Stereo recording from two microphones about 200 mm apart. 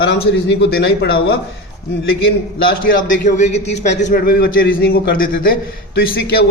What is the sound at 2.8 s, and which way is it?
A man's voice, 40° left (ahead or behind).